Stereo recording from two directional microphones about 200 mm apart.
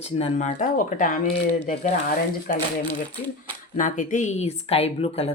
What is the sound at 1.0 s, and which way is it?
Speech, 45° left (ahead or behind).